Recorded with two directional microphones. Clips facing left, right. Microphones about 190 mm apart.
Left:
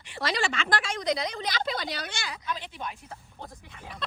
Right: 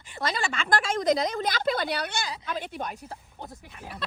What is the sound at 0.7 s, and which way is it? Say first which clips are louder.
Speech: right 8 dB; 50° right (ahead or behind).